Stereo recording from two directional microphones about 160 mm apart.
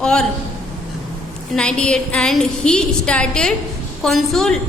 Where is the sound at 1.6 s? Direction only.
5° left (ahead or behind).